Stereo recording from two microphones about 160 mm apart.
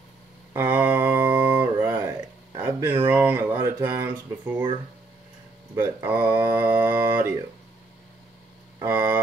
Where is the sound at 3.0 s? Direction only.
15° right (ahead or behind).